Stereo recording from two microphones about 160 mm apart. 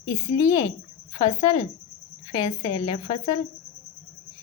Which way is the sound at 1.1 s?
25° left (ahead or behind).